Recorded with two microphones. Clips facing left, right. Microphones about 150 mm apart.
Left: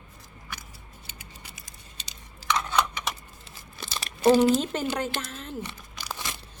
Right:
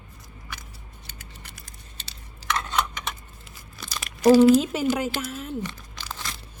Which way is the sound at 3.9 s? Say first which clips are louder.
Right 2 dB; 30° left (ahead or behind).